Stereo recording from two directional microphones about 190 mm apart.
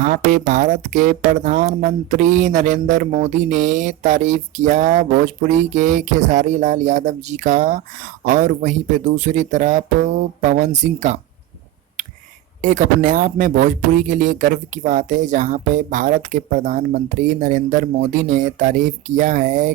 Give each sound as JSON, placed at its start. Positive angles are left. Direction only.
{"t": 0.0, "sound": "speech", "side_deg": -40}
{"t": 12.6, "sound": "speech", "side_deg": -40}